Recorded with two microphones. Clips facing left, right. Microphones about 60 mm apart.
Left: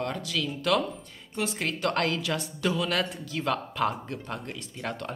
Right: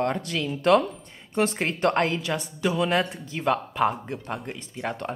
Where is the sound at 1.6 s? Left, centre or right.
Right.